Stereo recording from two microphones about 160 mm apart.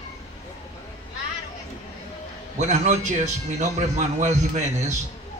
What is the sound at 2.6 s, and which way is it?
A man's voice, 50° right (ahead or behind).